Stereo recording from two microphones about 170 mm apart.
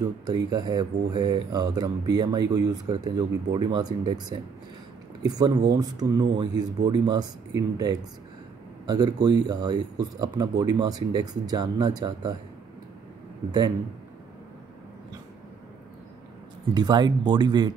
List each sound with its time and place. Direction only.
0.5 s speech: 25° right (ahead or behind)
16.7 s speech: 25° right (ahead or behind)